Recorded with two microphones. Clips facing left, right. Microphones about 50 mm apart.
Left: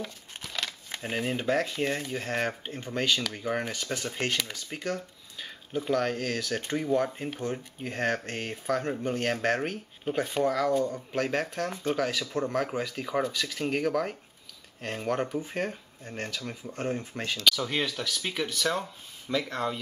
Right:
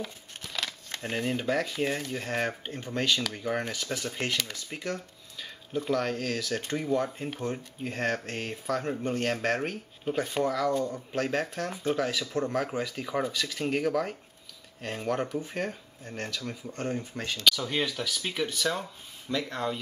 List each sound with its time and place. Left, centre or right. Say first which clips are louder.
0.0 s crumpling: even; centre
1.7 s speech: even; centre
4.9 s a sound: left 2 dB; centre
5.8 s speech: left 1 dB; centre
8.6 s speech: left 1 dB; left
10.8 s speech: left 2 dB; centre
11.1 s speech: even; left
12.2 s speech: even; centre